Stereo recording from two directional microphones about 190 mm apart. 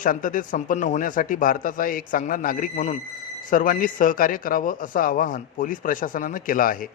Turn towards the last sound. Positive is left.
turn(degrees=45)  # may be behind; listen again after turning